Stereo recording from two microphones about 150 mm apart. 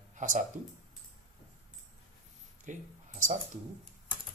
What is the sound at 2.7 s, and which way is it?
Speech, 55° right (ahead or behind).